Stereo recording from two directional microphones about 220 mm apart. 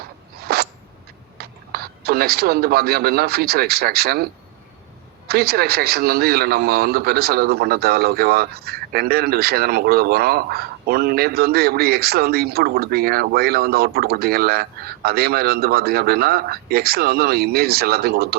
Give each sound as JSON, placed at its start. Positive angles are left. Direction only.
{"t": 0.3, "sound": "a sound", "side_deg": -45}
{"t": 1.4, "sound": "speech", "side_deg": -45}
{"t": 5.3, "sound": "a man's voice", "side_deg": -45}